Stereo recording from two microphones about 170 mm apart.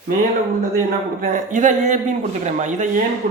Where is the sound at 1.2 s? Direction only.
50° right (ahead or behind).